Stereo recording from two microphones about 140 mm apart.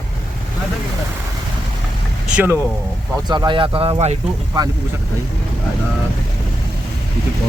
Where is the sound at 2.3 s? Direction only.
15° right (ahead or behind).